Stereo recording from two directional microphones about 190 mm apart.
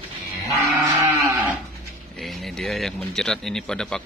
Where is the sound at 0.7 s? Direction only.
15° right (ahead or behind).